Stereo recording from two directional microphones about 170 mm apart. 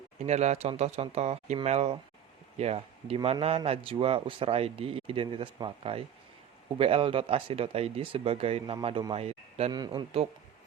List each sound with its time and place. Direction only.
0.3 s speech: 40° right (ahead or behind)
9.7 s speech: 25° right (ahead or behind)